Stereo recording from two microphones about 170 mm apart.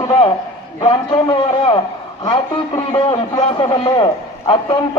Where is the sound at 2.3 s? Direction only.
35° left (ahead or behind).